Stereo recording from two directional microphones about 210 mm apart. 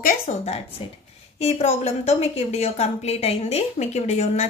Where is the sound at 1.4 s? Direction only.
30° left (ahead or behind).